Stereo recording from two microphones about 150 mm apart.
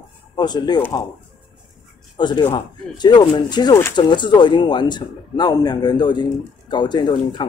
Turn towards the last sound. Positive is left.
turn(degrees=30)  # may be behind; listen again after turning